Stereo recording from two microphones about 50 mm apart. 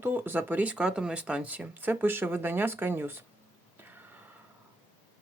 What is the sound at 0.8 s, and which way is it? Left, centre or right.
Speech, centre.